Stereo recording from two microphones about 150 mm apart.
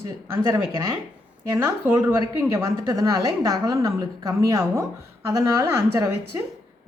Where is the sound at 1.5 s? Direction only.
15° right (ahead or behind).